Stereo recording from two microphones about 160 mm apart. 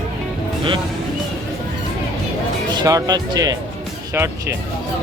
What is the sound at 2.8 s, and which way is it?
Speech, 25° right (ahead or behind).